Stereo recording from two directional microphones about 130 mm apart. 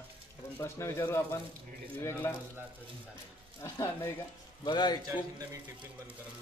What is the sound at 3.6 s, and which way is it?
Speech, 20° left (ahead or behind).